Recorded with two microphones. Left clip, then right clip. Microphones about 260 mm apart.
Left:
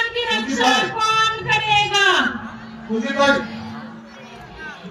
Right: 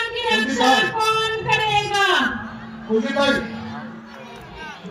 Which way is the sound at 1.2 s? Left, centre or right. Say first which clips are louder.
Left 2 dB; centre.